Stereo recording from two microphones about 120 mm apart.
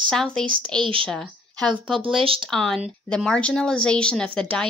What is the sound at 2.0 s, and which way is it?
Speech, 50° right (ahead or behind).